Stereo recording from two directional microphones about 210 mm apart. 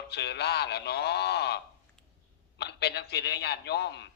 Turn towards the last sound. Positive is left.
turn(degrees=55)  # may be behind; listen again after turning